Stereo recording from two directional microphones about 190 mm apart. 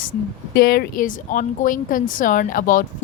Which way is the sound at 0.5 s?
55° left (ahead or behind).